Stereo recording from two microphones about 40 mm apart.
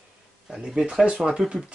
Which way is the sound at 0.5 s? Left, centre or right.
Centre.